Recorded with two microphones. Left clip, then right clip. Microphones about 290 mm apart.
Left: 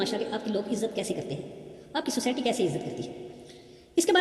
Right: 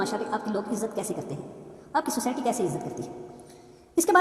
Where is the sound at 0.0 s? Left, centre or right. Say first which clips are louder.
Right 1 dB; centre.